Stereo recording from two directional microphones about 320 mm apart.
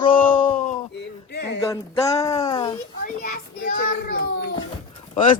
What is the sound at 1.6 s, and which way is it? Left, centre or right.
Speech, centre.